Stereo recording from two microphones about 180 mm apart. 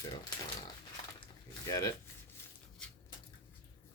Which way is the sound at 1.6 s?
20° left (ahead or behind).